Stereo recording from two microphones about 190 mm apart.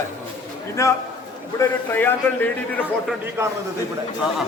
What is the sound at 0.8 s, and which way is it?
A man's voice, 15° left (ahead or behind).